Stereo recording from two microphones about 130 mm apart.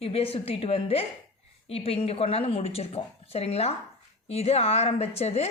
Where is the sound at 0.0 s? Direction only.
50° left (ahead or behind).